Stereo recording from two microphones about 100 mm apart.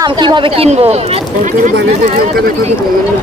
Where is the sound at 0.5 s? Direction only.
85° right.